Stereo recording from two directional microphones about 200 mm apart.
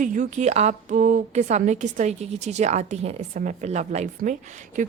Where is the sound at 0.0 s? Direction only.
40° right (ahead or behind).